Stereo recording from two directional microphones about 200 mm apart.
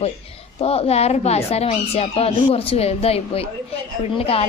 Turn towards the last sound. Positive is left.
turn(degrees=30)  # may be behind; listen again after turning